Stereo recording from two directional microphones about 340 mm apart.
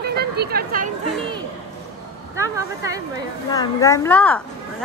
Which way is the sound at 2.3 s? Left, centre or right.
Centre.